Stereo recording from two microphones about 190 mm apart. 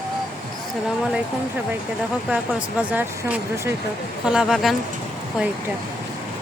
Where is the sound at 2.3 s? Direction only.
5° right (ahead or behind).